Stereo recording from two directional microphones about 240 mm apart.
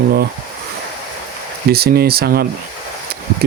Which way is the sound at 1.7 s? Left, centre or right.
Right.